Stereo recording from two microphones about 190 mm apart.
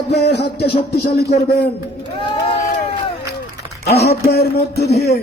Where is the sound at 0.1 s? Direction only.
60° left (ahead or behind).